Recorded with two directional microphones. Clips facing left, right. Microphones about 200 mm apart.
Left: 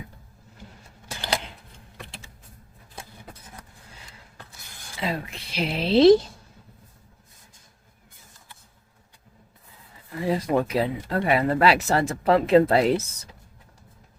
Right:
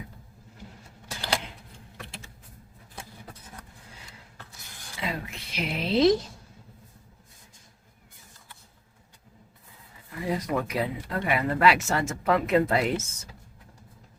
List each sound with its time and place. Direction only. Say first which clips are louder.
4.9 s speech: left 4 dB; 35° left (ahead or behind)
10.2 s speech: left 5 dB; 30° left (ahead or behind)